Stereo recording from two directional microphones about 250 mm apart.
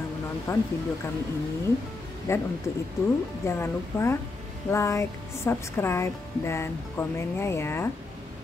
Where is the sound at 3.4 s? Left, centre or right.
Centre.